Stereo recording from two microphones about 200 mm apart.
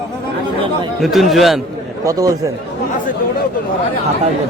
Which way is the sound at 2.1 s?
15° right (ahead or behind).